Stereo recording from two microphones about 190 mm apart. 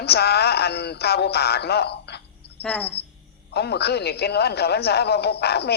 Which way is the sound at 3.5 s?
60° left (ahead or behind).